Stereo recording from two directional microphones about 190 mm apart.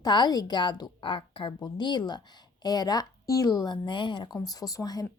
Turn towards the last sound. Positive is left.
turn(degrees=20)  # may be behind; listen again after turning